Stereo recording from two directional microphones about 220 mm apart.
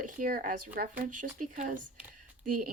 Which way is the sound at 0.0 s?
40° right (ahead or behind).